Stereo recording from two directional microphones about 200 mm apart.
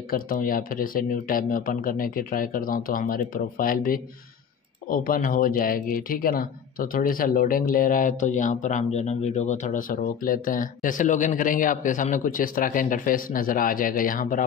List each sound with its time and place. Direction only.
0.1 s speech: 45° left (ahead or behind)